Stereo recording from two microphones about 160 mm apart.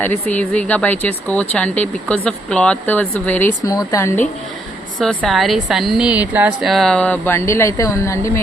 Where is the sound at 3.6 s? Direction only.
20° left (ahead or behind).